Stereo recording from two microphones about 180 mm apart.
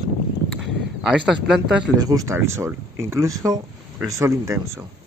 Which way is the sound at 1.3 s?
5° right (ahead or behind).